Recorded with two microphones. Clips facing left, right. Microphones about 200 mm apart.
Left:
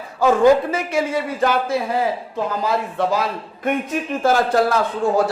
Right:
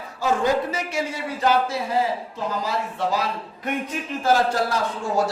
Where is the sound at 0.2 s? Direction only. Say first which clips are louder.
Left 8 dB; 55° left (ahead or behind).